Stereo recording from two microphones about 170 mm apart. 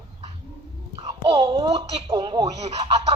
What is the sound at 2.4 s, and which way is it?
Speech, 40° right (ahead or behind).